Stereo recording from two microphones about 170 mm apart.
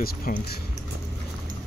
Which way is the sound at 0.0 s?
55° left (ahead or behind).